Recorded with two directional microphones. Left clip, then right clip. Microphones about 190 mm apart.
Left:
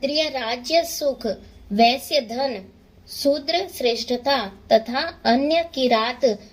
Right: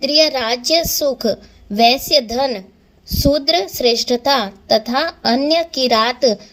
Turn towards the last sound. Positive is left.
turn(degrees=-35)  # may be behind; listen again after turning